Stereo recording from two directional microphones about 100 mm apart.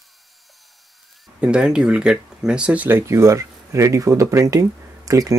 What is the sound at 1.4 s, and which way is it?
Speech, 10° right (ahead or behind).